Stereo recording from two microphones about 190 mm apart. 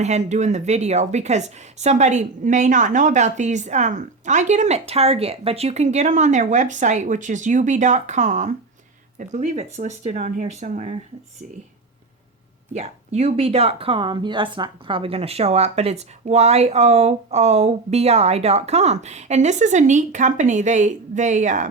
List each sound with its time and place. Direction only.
0.0 s speech: 35° right (ahead or behind)
12.7 s speech: 35° right (ahead or behind)